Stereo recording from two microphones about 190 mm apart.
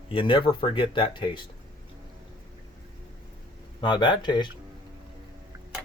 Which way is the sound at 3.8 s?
25° left (ahead or behind).